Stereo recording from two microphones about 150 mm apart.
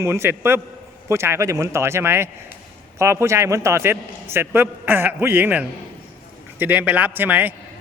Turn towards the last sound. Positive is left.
turn(degrees=-10)  # may be behind; listen again after turning